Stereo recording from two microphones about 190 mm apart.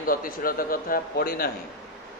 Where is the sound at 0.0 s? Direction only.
50° left (ahead or behind).